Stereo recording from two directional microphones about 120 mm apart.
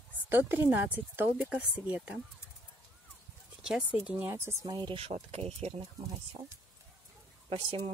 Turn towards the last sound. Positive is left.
turn(degrees=-45)  # may be behind; listen again after turning